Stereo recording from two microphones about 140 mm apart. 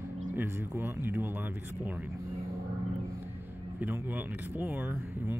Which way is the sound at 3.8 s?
10° right (ahead or behind).